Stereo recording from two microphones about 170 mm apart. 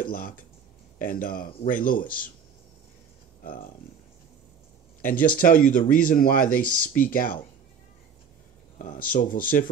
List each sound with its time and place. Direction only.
0.0 s speech: 55° left (ahead or behind)
5.0 s speech: 55° left (ahead or behind)
8.7 s speech: 50° left (ahead or behind)